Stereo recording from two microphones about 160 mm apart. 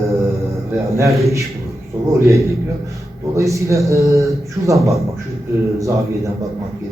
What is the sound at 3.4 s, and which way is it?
A man's voice, 20° right (ahead or behind).